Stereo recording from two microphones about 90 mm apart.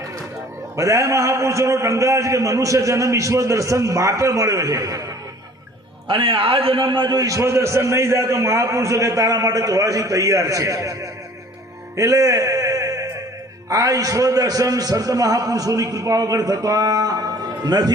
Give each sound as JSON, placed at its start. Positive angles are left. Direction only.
{"t": 0.8, "sound": "a man's voice", "side_deg": -35}
{"t": 6.1, "sound": "a man's voice", "side_deg": -75}
{"t": 7.2, "sound": "a man's voice", "side_deg": -35}